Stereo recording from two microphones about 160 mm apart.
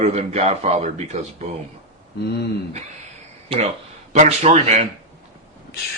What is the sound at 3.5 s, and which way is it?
A man's voice, 35° right (ahead or behind).